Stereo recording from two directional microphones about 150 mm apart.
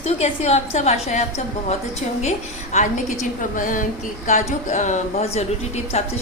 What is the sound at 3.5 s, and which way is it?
A woman's voice, 65° left (ahead or behind).